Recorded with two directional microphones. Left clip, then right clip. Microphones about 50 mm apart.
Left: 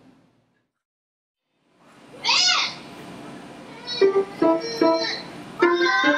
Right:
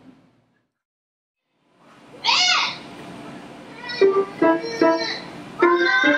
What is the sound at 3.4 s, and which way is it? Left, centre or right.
Cat, centre.